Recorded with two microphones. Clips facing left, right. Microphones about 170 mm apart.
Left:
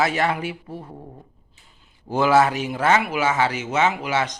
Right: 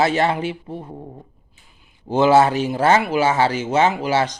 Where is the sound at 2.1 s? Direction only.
25° right (ahead or behind).